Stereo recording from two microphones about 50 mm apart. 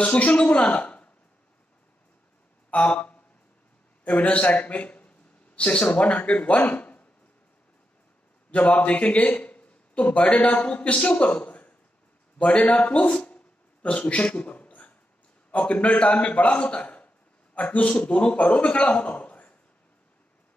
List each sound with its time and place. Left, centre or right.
0.0 s a woman's voice: left
2.7 s a sound: left
4.0 s a man's voice: left
8.5 s a man's voice: left